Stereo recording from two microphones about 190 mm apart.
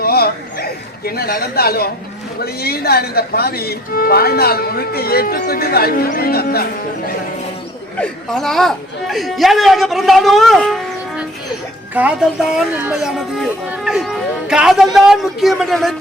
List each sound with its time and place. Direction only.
0.0 s a sound: 55° left (ahead or behind)
2.4 s speech: 55° left (ahead or behind)
7.9 s speech: 5° left (ahead or behind)
11.9 s speech: 5° right (ahead or behind)